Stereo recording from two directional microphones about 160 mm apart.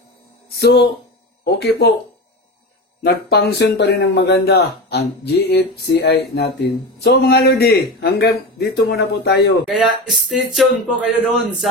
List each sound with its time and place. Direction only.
0.5 s speech: 90° left
3.0 s speech: 75° left (ahead or behind); by 9.6 s 90° left
9.7 s speech: centre (ahead or behind)